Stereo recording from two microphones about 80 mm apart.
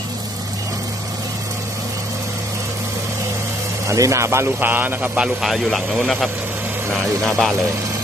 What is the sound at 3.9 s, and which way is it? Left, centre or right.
Speech, right.